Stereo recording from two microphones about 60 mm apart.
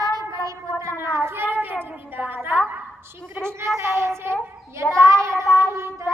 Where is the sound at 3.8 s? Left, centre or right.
Right.